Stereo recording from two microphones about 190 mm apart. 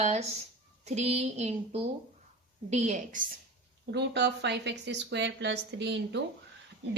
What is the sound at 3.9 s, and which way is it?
A woman's voice, 65° right (ahead or behind).